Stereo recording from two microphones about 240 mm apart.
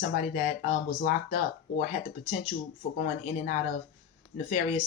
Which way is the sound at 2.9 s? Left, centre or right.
Left.